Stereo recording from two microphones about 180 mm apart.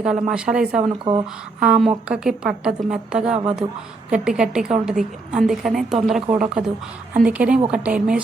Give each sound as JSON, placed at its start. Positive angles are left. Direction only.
{"t": 0.0, "sound": "a woman's voice", "side_deg": -5}
{"t": 1.1, "sound": "speech", "side_deg": -20}
{"t": 1.5, "sound": "a woman's voice", "side_deg": -5}